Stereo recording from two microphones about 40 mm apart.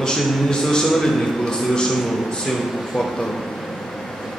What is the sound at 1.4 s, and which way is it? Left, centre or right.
Speech, centre.